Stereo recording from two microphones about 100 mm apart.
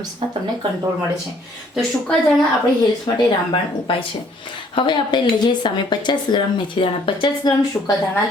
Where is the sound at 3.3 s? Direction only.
60° left (ahead or behind).